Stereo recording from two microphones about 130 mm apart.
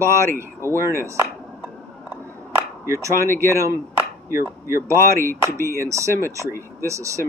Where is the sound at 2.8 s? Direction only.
20° right (ahead or behind).